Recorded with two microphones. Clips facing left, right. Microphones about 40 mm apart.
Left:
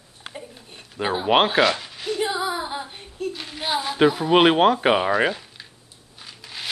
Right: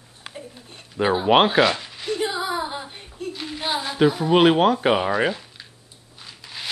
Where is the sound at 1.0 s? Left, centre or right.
Centre.